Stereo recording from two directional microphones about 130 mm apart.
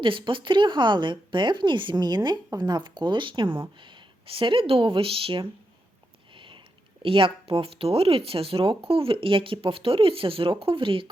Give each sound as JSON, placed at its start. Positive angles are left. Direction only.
{"t": 0.0, "sound": "a woman's voice", "side_deg": -40}
{"t": 6.3, "sound": "sniff", "side_deg": -40}
{"t": 7.0, "sound": "speech", "side_deg": -40}